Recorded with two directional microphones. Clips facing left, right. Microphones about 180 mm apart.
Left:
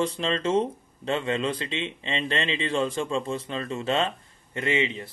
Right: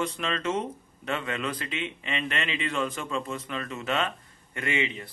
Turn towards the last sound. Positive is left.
turn(degrees=25)  # may be behind; listen again after turning